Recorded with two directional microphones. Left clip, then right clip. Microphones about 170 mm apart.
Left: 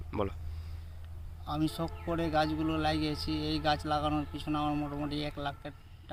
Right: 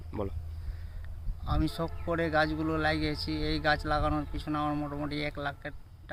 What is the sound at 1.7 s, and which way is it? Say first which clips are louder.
Speech: right 2 dB; centre (ahead or behind).